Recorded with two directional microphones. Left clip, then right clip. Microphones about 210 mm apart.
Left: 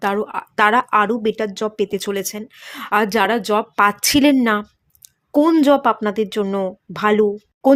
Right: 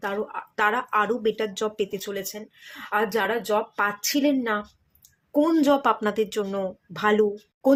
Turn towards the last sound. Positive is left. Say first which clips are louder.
# left 7 dB
turn(degrees=35)  # may be behind; listen again after turning